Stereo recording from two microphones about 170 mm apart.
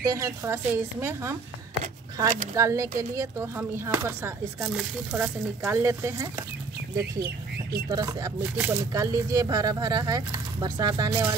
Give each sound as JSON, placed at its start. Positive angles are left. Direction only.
{"t": 0.0, "sound": "speech", "side_deg": -20}
{"t": 2.1, "sound": "speech", "side_deg": -20}
{"t": 4.7, "sound": "speech", "side_deg": -5}
{"t": 7.2, "sound": "speech", "side_deg": -65}
{"t": 7.9, "sound": "speech", "side_deg": -20}
{"t": 8.4, "sound": "speech", "side_deg": -10}